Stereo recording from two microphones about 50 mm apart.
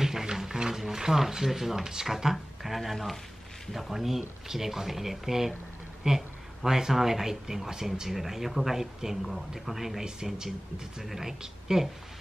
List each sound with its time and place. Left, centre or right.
0.0 s speech: centre